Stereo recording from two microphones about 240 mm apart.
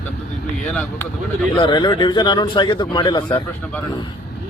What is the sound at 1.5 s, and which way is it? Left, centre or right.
Speech, centre.